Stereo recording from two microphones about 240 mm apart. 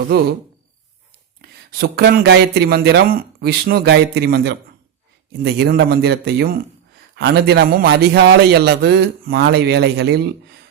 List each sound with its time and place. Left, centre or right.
1.4 s a man's voice: right